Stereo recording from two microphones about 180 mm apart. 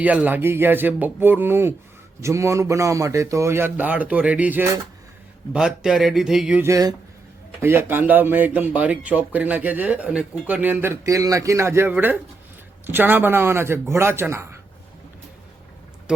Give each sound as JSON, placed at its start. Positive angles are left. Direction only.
{"t": 0.0, "sound": "speech", "side_deg": -10}
{"t": 16.1, "sound": "speech", "side_deg": -5}